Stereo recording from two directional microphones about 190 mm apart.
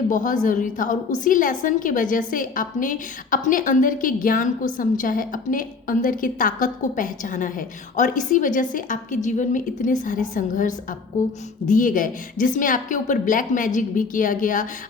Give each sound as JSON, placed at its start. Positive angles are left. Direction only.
{"t": 0.1, "sound": "a woman's voice", "side_deg": 45}